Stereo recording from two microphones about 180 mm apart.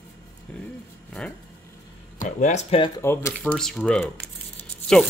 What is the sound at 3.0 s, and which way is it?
Speech, 15° left (ahead or behind).